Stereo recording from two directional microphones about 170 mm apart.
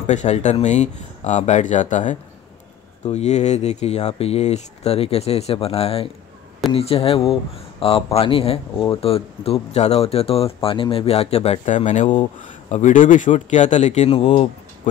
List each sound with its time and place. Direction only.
0.0 s speech: 45° left (ahead or behind)